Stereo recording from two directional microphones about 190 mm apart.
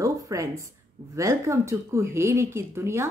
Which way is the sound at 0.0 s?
15° right (ahead or behind).